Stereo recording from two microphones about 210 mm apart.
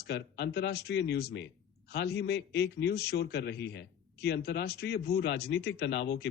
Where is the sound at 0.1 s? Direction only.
50° left (ahead or behind).